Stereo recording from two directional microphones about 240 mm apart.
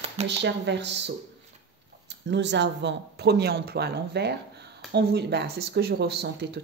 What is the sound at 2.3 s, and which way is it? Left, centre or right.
Speech, right.